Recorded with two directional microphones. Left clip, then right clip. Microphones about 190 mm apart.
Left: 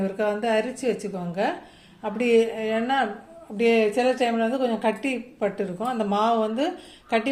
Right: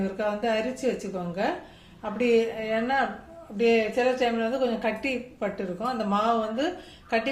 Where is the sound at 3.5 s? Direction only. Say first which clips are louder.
Left 2 dB; 45° left (ahead or behind).